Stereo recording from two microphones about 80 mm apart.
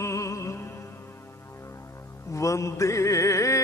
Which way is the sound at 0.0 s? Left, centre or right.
Left.